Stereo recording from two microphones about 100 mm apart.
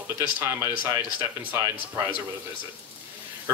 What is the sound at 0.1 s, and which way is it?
Speech, 25° right (ahead or behind).